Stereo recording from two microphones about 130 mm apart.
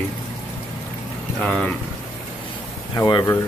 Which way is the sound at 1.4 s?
5° left (ahead or behind).